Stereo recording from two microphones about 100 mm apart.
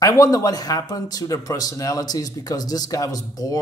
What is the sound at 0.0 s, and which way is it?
Speech, 35° left (ahead or behind).